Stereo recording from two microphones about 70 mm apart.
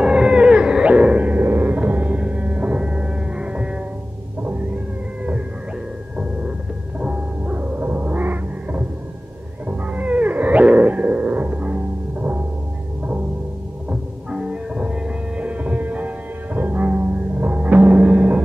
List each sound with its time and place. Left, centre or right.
0.0 s whale vocalization: centre
7.0 s music: centre
9.7 s cat: right
13.8 s music: centre